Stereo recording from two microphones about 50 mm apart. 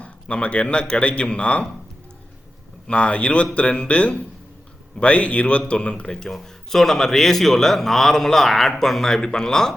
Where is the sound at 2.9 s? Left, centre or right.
Left.